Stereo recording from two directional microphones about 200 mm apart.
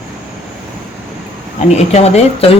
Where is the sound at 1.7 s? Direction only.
35° left (ahead or behind).